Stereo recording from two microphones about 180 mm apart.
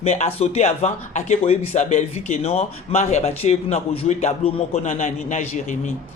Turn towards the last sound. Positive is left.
turn(degrees=40)  # may be behind; listen again after turning